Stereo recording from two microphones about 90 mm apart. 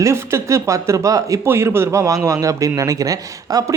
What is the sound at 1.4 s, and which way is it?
Speech, 30° right (ahead or behind).